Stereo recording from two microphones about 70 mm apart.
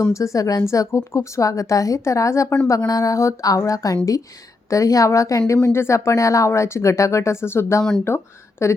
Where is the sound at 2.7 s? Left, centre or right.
Left.